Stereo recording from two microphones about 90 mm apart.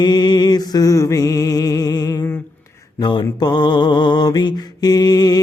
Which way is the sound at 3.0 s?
60° left (ahead or behind).